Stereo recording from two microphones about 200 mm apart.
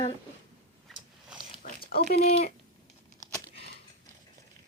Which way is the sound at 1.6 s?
50° left (ahead or behind).